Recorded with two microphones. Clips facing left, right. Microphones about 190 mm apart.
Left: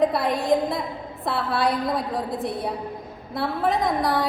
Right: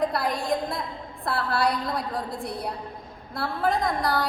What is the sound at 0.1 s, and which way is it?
A woman's voice, centre (ahead or behind).